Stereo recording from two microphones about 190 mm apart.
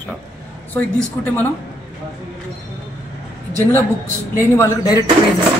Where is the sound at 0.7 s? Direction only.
10° left (ahead or behind).